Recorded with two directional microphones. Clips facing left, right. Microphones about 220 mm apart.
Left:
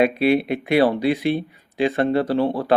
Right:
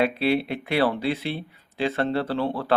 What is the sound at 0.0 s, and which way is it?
Speech, 15° left (ahead or behind).